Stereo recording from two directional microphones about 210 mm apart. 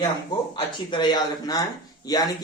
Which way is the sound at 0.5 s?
20° left (ahead or behind).